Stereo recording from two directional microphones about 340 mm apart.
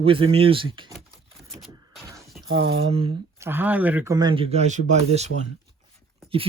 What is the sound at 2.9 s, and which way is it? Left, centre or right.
Speech, centre.